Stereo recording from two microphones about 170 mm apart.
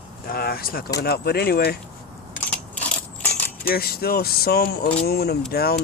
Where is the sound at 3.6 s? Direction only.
65° left (ahead or behind).